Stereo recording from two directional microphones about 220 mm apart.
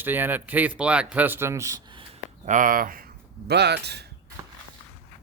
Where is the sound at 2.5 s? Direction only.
40° right (ahead or behind).